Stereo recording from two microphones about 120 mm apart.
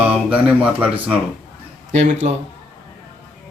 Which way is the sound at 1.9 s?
70° right (ahead or behind).